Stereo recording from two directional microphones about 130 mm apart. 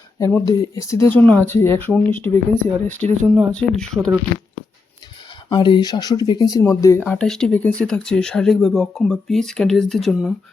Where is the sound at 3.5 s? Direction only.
5° left (ahead or behind).